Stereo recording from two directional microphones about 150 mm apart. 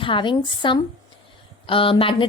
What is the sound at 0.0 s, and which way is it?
A woman's voice, 35° left (ahead or behind).